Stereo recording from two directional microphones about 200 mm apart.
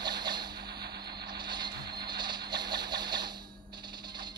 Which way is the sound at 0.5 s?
55° right (ahead or behind).